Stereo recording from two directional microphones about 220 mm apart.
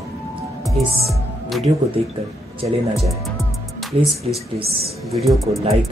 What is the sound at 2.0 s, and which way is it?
Speech, 25° right (ahead or behind).